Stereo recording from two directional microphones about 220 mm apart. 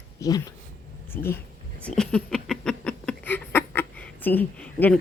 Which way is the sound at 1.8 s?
5° left (ahead or behind).